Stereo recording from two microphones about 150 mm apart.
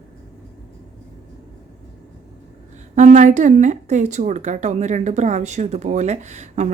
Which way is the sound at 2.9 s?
55° right (ahead or behind).